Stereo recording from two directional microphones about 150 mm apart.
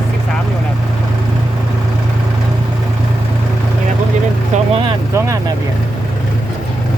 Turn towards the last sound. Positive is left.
turn(degrees=-20)  # may be behind; listen again after turning